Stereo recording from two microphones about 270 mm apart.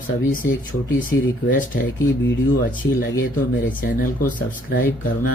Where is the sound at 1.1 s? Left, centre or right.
Left.